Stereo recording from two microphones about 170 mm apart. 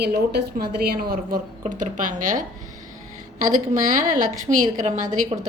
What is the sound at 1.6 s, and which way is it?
Speech, 50° right (ahead or behind).